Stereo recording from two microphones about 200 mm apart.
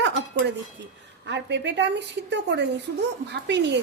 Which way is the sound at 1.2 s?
60° right (ahead or behind).